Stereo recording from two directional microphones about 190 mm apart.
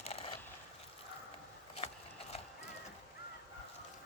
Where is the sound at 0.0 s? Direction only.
30° left (ahead or behind).